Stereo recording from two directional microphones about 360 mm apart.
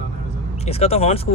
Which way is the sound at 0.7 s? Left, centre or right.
Centre.